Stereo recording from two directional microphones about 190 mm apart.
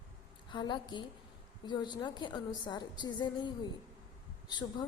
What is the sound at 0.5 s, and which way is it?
A woman's voice, 25° left (ahead or behind).